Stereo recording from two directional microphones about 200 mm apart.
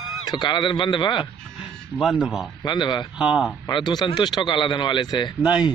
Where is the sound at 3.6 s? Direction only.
20° left (ahead or behind).